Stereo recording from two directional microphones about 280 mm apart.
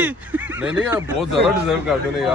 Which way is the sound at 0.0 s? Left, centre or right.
Centre.